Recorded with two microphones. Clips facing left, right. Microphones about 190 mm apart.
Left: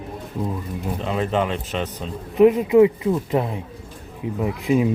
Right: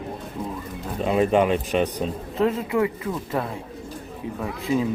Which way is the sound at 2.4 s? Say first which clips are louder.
Left 9 dB; 15° left (ahead or behind).